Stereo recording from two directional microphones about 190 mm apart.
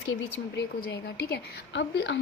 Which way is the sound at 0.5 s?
65° left (ahead or behind).